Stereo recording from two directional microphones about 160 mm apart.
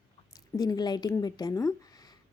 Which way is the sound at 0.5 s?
25° left (ahead or behind).